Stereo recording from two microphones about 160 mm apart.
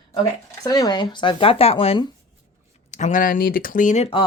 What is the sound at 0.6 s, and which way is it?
Speech, 25° left (ahead or behind).